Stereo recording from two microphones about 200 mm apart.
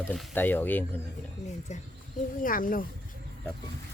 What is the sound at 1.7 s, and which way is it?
Speech, 35° left (ahead or behind).